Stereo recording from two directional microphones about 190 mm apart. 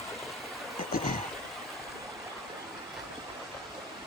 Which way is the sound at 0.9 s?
50° left (ahead or behind).